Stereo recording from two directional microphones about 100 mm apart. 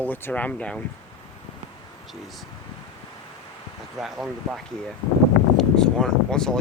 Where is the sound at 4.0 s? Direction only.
5° right (ahead or behind).